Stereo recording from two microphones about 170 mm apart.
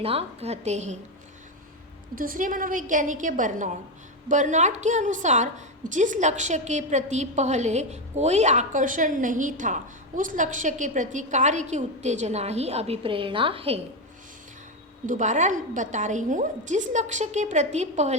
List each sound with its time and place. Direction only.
0.0 s a woman's voice: 35° right (ahead or behind)
2.1 s a woman's voice: 55° right (ahead or behind); by 13.8 s 35° right (ahead or behind)
15.0 s a woman's voice: 45° right (ahead or behind)